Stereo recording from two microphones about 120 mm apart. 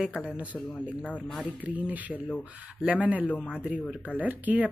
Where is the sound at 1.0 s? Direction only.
15° left (ahead or behind).